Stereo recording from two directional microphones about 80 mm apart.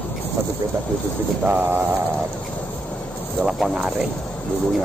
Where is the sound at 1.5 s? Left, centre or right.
Right.